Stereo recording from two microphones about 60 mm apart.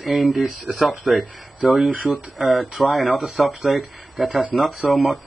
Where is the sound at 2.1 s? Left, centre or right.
Centre.